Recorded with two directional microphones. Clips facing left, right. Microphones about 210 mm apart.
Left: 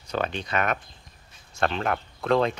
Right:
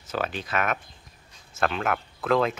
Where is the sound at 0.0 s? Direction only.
5° right (ahead or behind).